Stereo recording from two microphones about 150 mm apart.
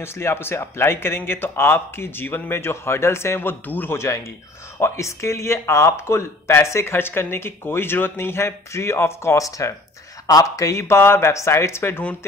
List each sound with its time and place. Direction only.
0.0 s speech: 15° left (ahead or behind)